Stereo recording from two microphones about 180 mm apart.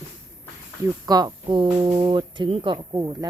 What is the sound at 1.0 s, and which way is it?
Speech, 20° right (ahead or behind).